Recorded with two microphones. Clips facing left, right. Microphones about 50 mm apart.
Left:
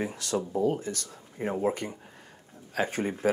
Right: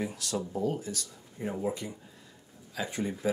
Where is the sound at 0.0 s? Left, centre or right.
Left.